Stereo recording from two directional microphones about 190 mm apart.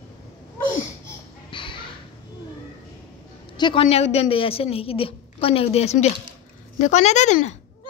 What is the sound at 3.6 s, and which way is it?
A woman's voice, 25° left (ahead or behind).